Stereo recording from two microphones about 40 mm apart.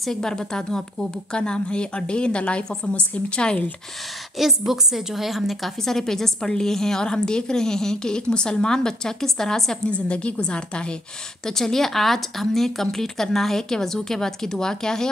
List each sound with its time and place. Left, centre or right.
0.0 s a woman's voice: centre
4.4 s a woman's voice: centre
5.8 s a woman's voice: centre
10.0 s a woman's voice: left
11.4 s a woman's voice: centre